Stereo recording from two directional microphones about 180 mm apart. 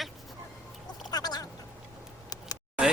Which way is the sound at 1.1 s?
20° left (ahead or behind).